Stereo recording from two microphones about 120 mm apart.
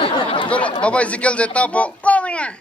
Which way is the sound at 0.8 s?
10° left (ahead or behind).